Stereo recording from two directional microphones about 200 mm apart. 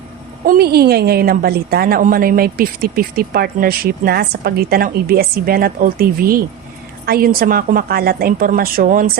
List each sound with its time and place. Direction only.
0.4 s a woman's voice: 50° right (ahead or behind)